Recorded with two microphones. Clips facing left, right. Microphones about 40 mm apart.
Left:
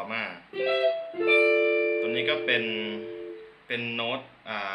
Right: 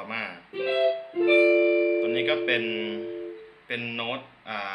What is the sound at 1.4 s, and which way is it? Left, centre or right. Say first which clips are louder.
Music: right 3 dB; left.